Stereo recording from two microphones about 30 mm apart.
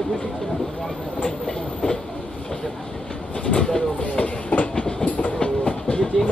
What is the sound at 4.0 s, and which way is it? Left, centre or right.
Train, left.